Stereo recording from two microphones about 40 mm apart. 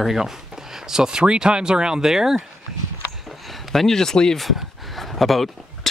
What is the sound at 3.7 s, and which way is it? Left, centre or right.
Speech, centre.